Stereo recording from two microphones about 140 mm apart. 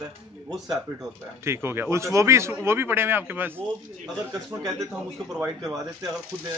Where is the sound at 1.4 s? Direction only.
15° right (ahead or behind).